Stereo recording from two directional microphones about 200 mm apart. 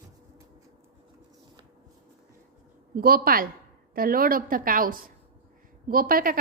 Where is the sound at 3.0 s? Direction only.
45° right (ahead or behind).